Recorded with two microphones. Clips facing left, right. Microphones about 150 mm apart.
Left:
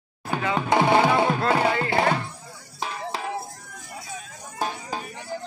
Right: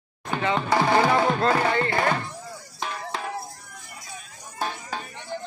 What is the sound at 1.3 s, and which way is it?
Music, 5° left (ahead or behind).